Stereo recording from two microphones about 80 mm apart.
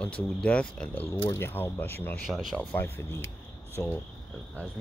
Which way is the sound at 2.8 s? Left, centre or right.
Left.